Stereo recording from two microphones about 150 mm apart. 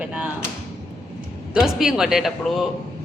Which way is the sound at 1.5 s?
5° right (ahead or behind).